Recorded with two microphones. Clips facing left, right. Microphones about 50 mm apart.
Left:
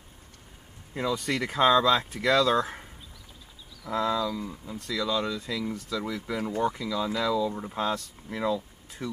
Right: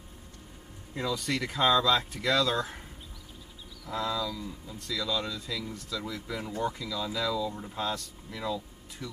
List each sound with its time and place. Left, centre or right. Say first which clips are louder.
1.1 s speech: left 3 dB; left
3.8 s speech: left 5 dB; left
8.3 s speech: left 6 dB; left